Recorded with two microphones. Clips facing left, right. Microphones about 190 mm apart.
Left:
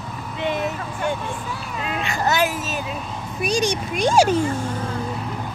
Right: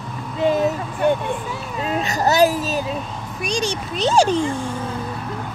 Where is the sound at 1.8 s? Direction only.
40° right (ahead or behind).